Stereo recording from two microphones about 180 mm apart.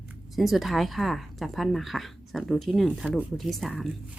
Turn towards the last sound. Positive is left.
turn(degrees=0)  # may be behind; listen again after turning